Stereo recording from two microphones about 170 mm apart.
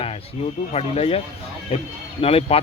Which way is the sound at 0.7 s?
35° left (ahead or behind).